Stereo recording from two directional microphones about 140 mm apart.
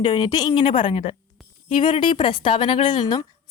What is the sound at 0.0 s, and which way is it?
A woman's voice, 30° left (ahead or behind).